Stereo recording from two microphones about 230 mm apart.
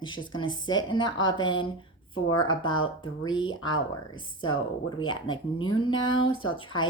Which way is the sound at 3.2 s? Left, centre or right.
Left.